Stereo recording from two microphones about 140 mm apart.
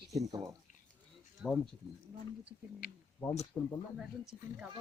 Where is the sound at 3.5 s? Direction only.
15° left (ahead or behind).